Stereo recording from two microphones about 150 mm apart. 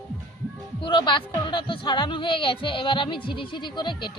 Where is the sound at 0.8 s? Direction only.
35° left (ahead or behind).